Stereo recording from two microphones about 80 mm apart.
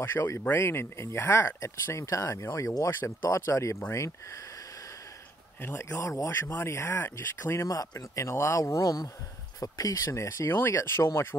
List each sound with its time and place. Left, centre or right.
0.0 s speech: left
5.6 s speech: left
6.3 s speech: left
7.6 s speech: left